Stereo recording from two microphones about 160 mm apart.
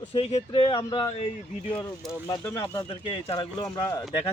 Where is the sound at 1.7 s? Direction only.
Centre (ahead or behind).